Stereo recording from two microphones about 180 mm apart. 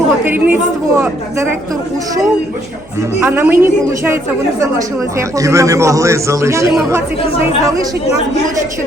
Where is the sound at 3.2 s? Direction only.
10° right (ahead or behind).